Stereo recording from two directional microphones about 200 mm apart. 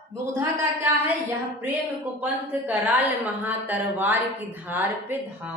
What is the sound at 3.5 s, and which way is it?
A woman's voice, 10° right (ahead or behind).